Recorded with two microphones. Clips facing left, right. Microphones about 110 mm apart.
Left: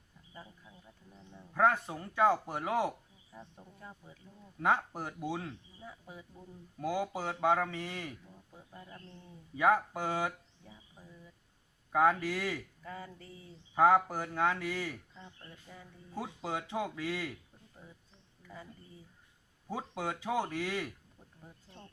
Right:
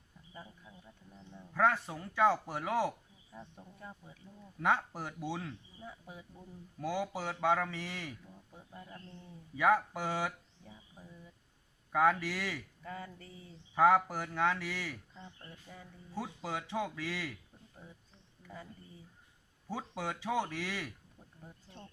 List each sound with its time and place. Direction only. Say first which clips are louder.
1.5 s speech: left 2 dB; 15° left (ahead or behind)
3.3 s speech: right 1 dB; 5° left (ahead or behind)
5.8 s speech: even; 5° right (ahead or behind)
6.9 s speech: left 1 dB; 15° left (ahead or behind)
8.3 s speech: even; centre (ahead or behind)
9.6 s speech: left 1 dB; 15° left (ahead or behind)
11.0 s speech: right 1 dB; 5° right (ahead or behind)
11.9 s speech: left 1 dB; 20° left (ahead or behind)
12.8 s speech: even; 5° left (ahead or behind)
13.7 s speech: left 1 dB; 20° left (ahead or behind)
15.7 s speech: even; centre (ahead or behind)
16.1 s speech: left 1 dB; 20° left (ahead or behind)
17.8 s speech: right 1 dB; centre (ahead or behind); by 20.9 s 20° left (ahead or behind)
21.4 s speech: right 1 dB; centre (ahead or behind)